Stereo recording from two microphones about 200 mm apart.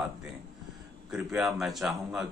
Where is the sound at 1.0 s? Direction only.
5° right (ahead or behind).